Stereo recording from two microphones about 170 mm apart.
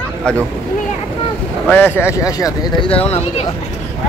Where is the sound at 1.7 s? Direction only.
10° left (ahead or behind); by 3.2 s 35° left (ahead or behind).